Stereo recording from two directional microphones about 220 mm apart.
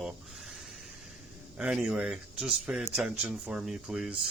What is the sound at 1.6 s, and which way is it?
Speech, 5° right (ahead or behind).